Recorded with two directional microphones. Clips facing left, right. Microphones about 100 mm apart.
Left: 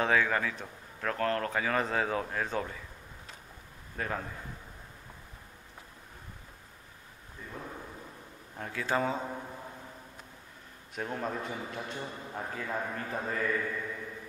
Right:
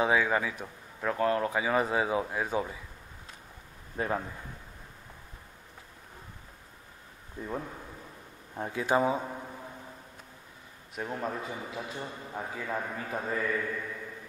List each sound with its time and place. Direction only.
0.0 s a man's voice: 15° right (ahead or behind)
3.9 s a man's voice: 20° right (ahead or behind)
7.4 s speech: 40° right (ahead or behind)
8.5 s a man's voice: 20° right (ahead or behind)
11.0 s a man's voice: 5° right (ahead or behind)